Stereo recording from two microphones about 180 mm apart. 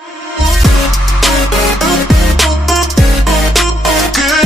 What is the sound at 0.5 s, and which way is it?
Music, centre (ahead or behind).